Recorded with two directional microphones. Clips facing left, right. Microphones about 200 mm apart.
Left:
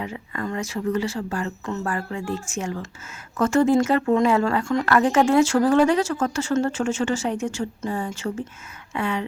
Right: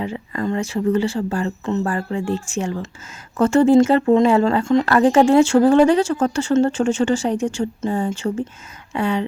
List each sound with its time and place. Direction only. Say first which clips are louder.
0.0 s speech: right 6 dB; 30° right (ahead or behind)